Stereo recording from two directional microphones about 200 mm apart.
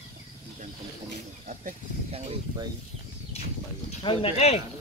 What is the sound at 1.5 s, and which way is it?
Speech, 40° right (ahead or behind).